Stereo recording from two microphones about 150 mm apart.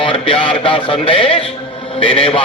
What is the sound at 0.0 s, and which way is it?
A man's voice, 35° left (ahead or behind).